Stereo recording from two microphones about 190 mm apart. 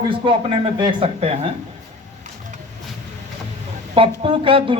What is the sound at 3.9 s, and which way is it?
Speech, 30° right (ahead or behind).